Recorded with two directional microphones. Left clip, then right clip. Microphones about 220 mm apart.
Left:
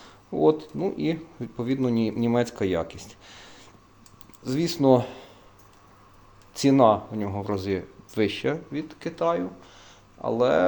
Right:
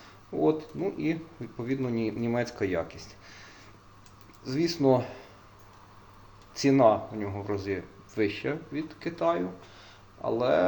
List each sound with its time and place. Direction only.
0.4 s speech: 45° left (ahead or behind)
4.4 s speech: 50° left (ahead or behind)
6.6 s speech: 50° left (ahead or behind)